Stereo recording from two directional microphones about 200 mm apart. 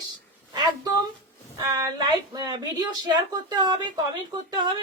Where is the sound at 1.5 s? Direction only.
20° right (ahead or behind).